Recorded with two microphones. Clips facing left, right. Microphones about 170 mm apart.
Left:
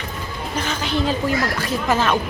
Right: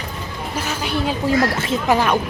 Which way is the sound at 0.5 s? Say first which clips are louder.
Even; 10° right (ahead or behind).